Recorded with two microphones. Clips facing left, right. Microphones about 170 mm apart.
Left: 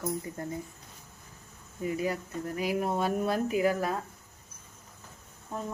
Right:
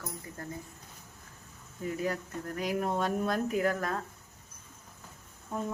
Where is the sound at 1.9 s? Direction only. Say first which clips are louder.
Left 2 dB; 10° left (ahead or behind).